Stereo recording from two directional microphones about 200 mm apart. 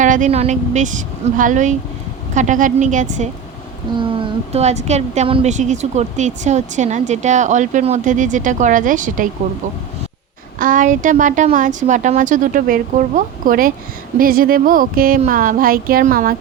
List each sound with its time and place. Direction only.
0.0 s a woman's voice: 40° right (ahead or behind)
3.9 s a woman's voice: 25° right (ahead or behind); by 9.3 s 40° right (ahead or behind)
10.6 s a woman's voice: 40° right (ahead or behind)